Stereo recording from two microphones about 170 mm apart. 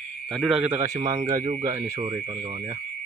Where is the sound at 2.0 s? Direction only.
35° right (ahead or behind).